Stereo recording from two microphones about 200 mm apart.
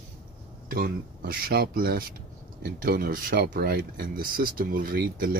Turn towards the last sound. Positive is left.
turn(degrees=-45)  # may be behind; listen again after turning